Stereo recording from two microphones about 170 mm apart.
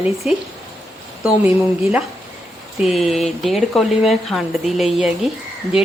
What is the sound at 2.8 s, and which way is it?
Speech, centre (ahead or behind).